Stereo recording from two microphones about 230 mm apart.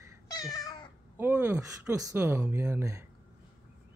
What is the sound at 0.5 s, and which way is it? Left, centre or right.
Cat, centre.